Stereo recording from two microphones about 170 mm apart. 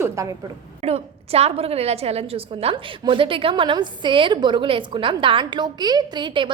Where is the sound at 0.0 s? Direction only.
20° right (ahead or behind).